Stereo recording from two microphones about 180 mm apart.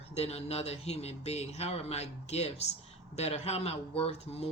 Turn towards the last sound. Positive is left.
turn(degrees=35)  # may be behind; listen again after turning